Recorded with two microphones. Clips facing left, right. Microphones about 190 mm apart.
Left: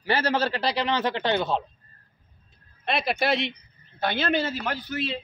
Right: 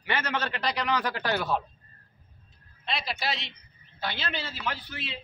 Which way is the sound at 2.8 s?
55° left (ahead or behind).